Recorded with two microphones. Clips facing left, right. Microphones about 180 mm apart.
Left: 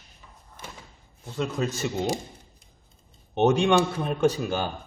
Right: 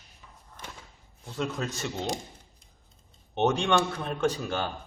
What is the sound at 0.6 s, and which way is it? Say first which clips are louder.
Slam: left 2 dB; 5° left (ahead or behind).